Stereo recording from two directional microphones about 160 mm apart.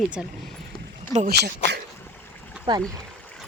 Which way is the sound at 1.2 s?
90° right.